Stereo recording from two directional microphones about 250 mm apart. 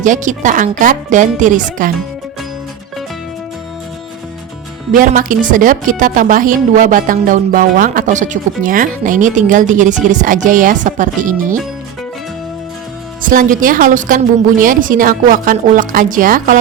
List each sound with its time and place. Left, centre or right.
0.0 s a woman's voice: right
4.9 s a woman's voice: right
13.2 s a woman's voice: right